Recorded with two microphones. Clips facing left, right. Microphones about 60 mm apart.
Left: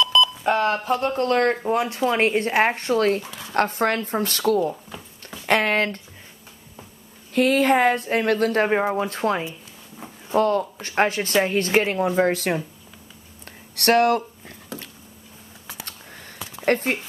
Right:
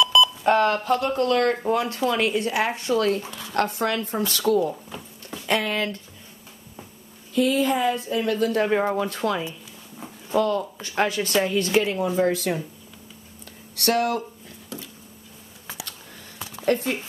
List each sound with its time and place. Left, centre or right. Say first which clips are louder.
0.0 s telephone dialing: right 1 dB; centre
1.0 s speech: left 3 dB; left
1.7 s speech: left 1 dB; left
2.0 s a woman's voice: left 3 dB; left
7.3 s a woman's voice: left 3 dB; left
8.9 s speech: left 2 dB; left
9.9 s walk: even; centre
10.3 s a woman's voice: left 2 dB; left
13.7 s a woman's voice: left 5 dB; left
16.6 s a woman's voice: left 2 dB; left